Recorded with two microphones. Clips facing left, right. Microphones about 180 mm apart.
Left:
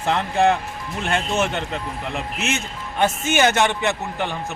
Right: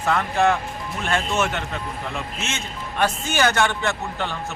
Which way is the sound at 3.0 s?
25° left (ahead or behind).